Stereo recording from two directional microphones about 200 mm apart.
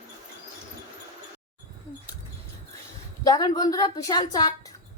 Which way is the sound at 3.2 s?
20° left (ahead or behind).